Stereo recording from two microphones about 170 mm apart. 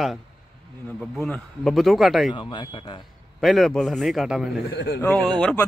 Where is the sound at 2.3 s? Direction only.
25° left (ahead or behind).